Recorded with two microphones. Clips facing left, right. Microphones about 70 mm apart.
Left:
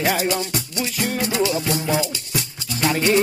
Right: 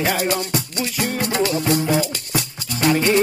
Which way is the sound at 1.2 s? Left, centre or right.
Right.